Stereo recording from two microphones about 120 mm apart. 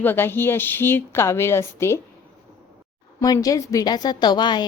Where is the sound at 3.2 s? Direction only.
30° left (ahead or behind).